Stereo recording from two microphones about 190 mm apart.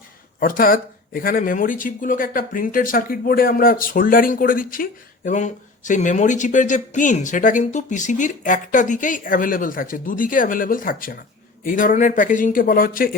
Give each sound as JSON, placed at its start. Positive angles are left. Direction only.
{"t": 0.3, "sound": "speech", "side_deg": 50}